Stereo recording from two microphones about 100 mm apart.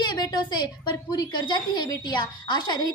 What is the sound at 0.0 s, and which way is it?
A woman's voice, 45° left (ahead or behind).